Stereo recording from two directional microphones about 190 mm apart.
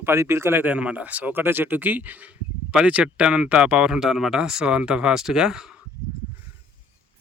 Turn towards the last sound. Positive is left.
turn(degrees=-5)  # may be behind; listen again after turning